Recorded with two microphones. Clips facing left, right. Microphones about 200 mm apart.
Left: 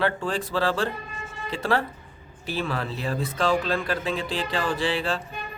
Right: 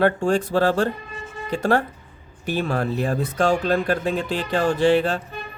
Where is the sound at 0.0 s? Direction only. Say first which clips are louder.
Right 7 dB; 45° right (ahead or behind).